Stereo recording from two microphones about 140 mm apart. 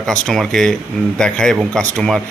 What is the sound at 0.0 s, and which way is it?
Speech, 5° left (ahead or behind).